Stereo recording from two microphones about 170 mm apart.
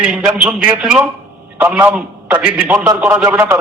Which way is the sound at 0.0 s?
5° right (ahead or behind).